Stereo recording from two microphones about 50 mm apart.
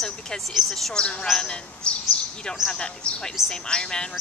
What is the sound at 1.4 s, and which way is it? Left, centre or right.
Speech, centre.